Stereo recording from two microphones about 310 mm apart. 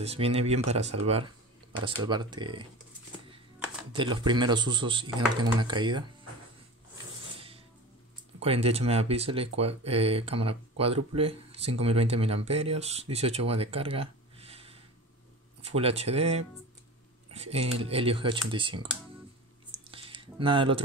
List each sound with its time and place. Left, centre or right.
0.0 s speech: centre
3.9 s speech: centre
7.3 s music: centre
8.4 s speech: centre
19.9 s a sound: centre